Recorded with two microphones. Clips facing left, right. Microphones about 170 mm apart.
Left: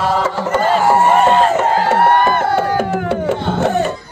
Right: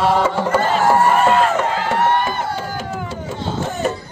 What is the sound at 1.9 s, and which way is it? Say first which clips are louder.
Music: left 4 dB; 55° left (ahead or behind).